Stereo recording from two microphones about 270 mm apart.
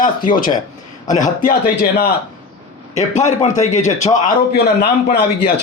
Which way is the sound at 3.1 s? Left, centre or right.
Left.